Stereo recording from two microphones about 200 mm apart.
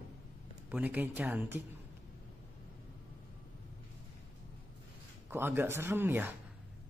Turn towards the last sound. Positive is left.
turn(degrees=-10)  # may be behind; listen again after turning